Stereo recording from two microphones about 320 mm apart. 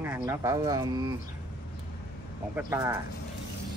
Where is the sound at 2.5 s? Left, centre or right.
Centre.